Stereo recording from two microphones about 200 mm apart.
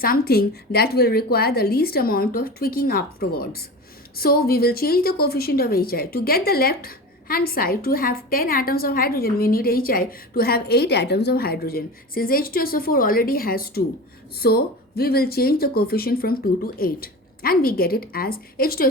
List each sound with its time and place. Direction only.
0.0 s a woman's voice: 50° left (ahead or behind)